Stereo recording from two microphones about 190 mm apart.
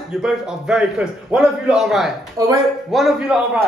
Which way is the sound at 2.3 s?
15° right (ahead or behind).